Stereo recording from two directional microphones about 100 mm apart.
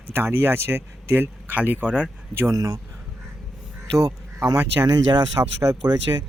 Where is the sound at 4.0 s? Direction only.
30° right (ahead or behind).